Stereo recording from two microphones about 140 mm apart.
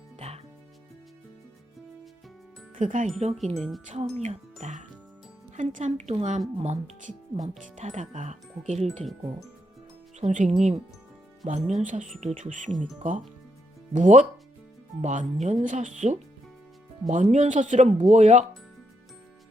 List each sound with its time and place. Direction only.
2.7 s speech: 65° right (ahead or behind)
3.5 s chime: centre (ahead or behind)
3.8 s speech: 55° right (ahead or behind)
10.2 s speech: 55° right (ahead or behind)